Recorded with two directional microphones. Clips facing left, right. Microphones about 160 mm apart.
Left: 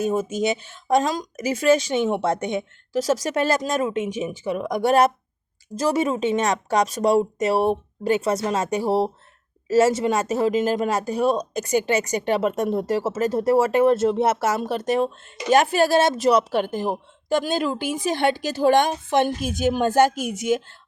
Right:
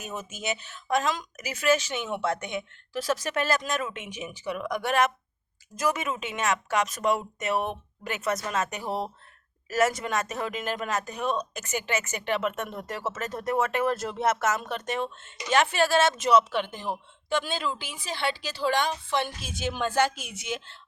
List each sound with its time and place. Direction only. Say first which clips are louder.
0.0 s a woman's voice: left 13 dB; 35° left (ahead or behind)